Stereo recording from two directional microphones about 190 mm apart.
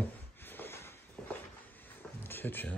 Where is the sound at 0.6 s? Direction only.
10° left (ahead or behind).